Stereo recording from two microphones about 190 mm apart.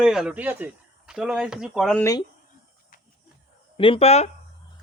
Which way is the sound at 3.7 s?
30° left (ahead or behind).